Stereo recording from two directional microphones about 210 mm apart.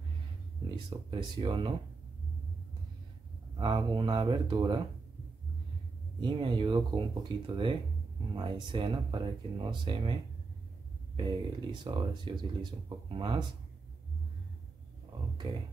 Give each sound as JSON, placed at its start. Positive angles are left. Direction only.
{"t": 0.7, "sound": "speech", "side_deg": -20}
{"t": 3.5, "sound": "speech", "side_deg": -20}
{"t": 6.2, "sound": "speech", "side_deg": -20}
{"t": 11.1, "sound": "speech", "side_deg": -20}